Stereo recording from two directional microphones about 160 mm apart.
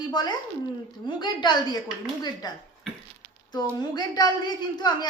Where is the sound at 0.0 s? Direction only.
25° left (ahead or behind).